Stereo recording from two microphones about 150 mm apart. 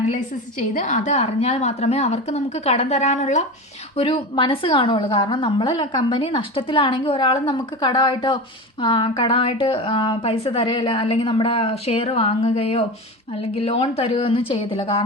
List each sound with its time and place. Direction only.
0.7 s a woman's voice: 55° left (ahead or behind)
3.9 s a woman's voice: 40° left (ahead or behind)